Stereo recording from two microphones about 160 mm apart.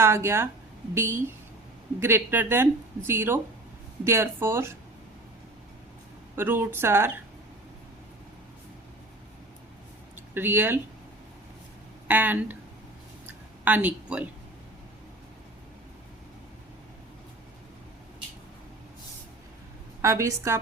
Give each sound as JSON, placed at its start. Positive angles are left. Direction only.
{"t": 0.0, "sound": "speech", "side_deg": -15}
{"t": 6.3, "sound": "speech", "side_deg": -15}
{"t": 10.3, "sound": "speech", "side_deg": -15}
{"t": 12.0, "sound": "speech", "side_deg": -10}
{"t": 13.7, "sound": "speech", "side_deg": -10}
{"t": 20.0, "sound": "a woman's voice", "side_deg": -20}